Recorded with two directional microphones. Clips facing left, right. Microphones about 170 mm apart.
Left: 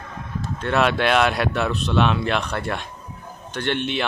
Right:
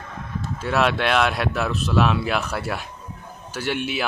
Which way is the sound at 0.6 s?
Centre (ahead or behind).